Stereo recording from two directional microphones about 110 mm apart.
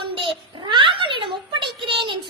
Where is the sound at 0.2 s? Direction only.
50° right (ahead or behind).